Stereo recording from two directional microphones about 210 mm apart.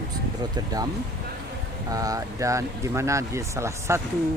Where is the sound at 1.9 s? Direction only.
15° right (ahead or behind).